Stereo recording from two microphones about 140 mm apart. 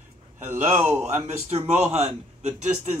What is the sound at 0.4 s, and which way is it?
Speech, 15° right (ahead or behind).